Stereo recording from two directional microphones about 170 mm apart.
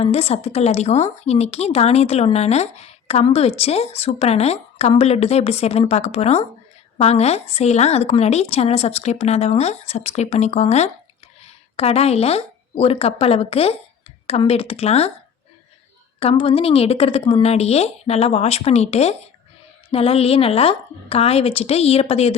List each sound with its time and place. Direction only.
0.0 s speech: 35° left (ahead or behind)
16.2 s speech: 30° left (ahead or behind)